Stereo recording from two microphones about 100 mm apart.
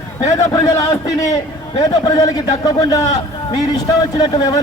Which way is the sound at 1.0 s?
35° left (ahead or behind).